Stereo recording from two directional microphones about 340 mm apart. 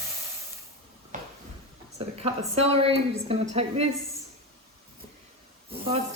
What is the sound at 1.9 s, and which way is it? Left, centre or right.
A woman's voice, centre.